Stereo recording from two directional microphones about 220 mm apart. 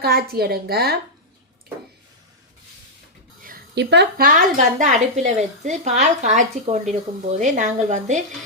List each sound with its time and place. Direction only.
0.0 s a woman's voice: 45° right (ahead or behind)
3.4 s a woman's voice: 45° right (ahead or behind)